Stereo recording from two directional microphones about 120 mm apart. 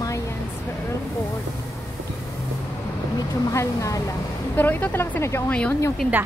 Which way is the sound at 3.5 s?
25° left (ahead or behind).